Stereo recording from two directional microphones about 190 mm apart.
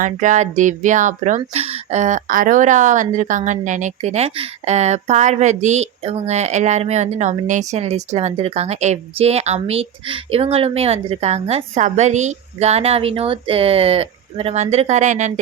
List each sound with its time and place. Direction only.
0.0 s speech: 40° right (ahead or behind)